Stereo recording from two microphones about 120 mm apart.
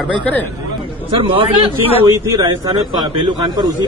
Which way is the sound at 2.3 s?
35° right (ahead or behind).